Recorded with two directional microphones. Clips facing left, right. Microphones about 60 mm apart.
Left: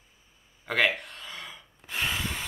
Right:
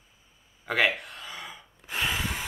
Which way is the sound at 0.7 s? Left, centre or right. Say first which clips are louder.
Even; centre.